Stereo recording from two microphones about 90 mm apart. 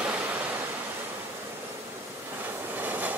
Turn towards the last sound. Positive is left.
turn(degrees=-20)  # may be behind; listen again after turning